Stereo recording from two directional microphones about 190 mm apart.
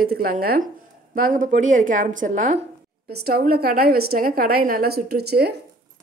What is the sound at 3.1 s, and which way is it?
A woman's voice, 55° right (ahead or behind).